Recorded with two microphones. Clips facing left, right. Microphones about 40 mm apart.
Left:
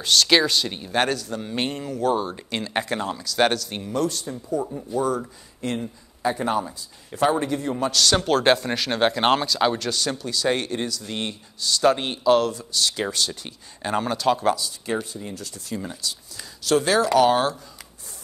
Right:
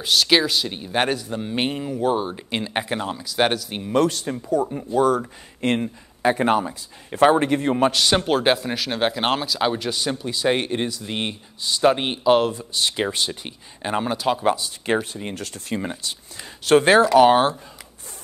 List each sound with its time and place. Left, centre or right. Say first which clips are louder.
0.0 s speech: even; centre
0.9 s speech: right 1 dB; centre
3.9 s a man's voice: right 6 dB; right
7.9 s speech: right 1 dB; right
15.0 s a man's voice: right 3 dB; right
17.0 s speech: right 4 dB; right